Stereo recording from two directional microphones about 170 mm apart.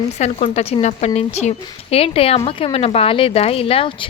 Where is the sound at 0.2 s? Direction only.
40° left (ahead or behind).